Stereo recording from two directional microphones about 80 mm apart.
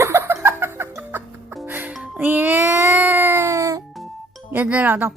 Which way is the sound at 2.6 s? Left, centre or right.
Right.